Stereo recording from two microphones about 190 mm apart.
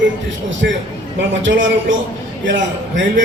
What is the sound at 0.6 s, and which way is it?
Speech, 60° right (ahead or behind).